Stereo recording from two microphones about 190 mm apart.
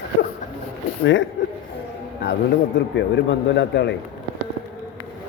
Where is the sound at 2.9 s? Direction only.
70° left (ahead or behind).